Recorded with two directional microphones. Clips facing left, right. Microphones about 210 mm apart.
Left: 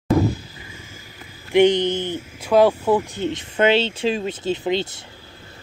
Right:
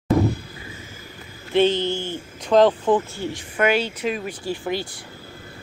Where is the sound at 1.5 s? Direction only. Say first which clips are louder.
Left 3 dB; 15° left (ahead or behind).